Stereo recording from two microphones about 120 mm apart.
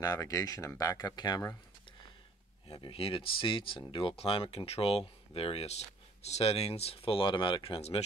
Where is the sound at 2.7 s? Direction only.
50° left (ahead or behind).